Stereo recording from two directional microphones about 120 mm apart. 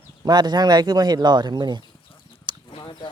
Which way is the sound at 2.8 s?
35° left (ahead or behind).